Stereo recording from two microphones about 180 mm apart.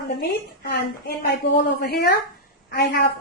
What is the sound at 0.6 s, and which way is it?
A woman's voice, 60° left (ahead or behind).